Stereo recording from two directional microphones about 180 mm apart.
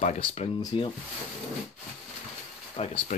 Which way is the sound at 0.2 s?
35° left (ahead or behind).